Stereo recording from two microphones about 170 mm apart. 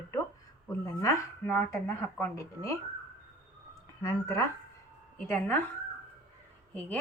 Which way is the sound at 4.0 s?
20° left (ahead or behind).